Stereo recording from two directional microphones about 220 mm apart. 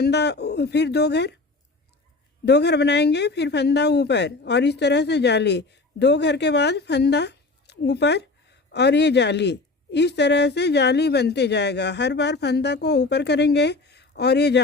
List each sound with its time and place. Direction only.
0.0 s a woman's voice: 50° left (ahead or behind)
2.4 s a woman's voice: 50° left (ahead or behind)